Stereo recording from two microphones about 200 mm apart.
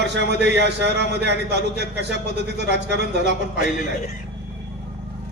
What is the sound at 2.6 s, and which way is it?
Speech, 60° right (ahead or behind).